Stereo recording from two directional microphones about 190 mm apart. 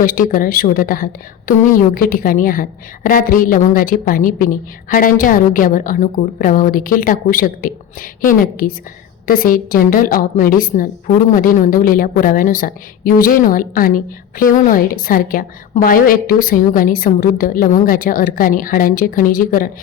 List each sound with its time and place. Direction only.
0.0 s a woman's voice: 50° left (ahead or behind)